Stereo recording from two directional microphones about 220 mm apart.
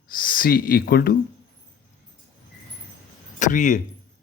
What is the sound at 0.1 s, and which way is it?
Speech, 40° left (ahead or behind).